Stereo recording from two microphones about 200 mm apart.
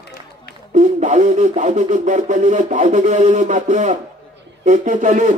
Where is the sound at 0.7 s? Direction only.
35° right (ahead or behind).